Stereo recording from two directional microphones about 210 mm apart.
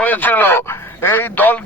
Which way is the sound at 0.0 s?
10° left (ahead or behind).